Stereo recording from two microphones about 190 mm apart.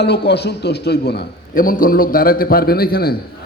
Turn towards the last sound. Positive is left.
turn(degrees=55)  # may be behind; listen again after turning